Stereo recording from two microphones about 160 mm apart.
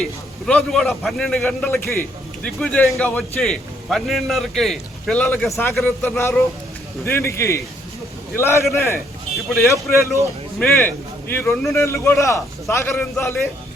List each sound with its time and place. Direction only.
0.0 s a man's voice: 5° left (ahead or behind)
9.5 s a man's voice: centre (ahead or behind)
10.6 s a man's voice: 10° left (ahead or behind)